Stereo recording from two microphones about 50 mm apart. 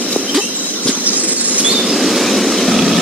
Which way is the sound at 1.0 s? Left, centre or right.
Right.